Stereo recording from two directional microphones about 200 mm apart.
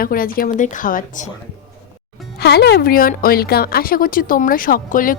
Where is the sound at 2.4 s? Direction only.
55° left (ahead or behind).